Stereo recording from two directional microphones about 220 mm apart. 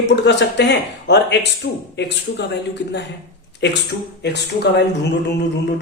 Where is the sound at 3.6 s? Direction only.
50° left (ahead or behind).